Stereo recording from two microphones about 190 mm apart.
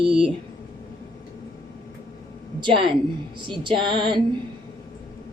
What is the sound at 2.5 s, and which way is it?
A woman's voice, 25° right (ahead or behind).